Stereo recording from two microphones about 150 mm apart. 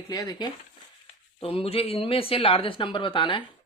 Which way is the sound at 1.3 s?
40° left (ahead or behind).